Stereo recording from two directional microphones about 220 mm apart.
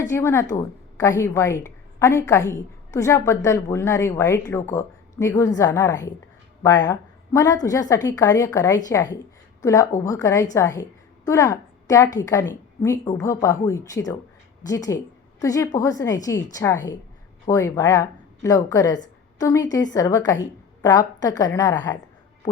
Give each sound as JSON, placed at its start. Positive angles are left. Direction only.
{"t": 0.0, "sound": "a woman's voice", "side_deg": 10}